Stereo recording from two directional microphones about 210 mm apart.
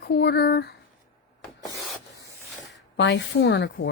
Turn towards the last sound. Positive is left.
turn(degrees=55)  # may be behind; listen again after turning